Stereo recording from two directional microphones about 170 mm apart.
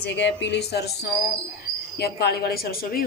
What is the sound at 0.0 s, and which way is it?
Speech, 90° left.